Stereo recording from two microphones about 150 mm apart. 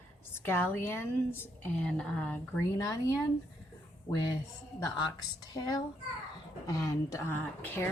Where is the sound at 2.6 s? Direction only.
20° left (ahead or behind).